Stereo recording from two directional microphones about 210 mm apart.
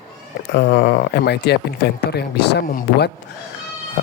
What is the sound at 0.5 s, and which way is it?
A man's voice, 50° left (ahead or behind).